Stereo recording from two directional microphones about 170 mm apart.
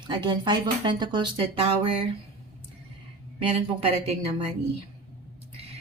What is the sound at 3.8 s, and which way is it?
Speech, 35° right (ahead or behind).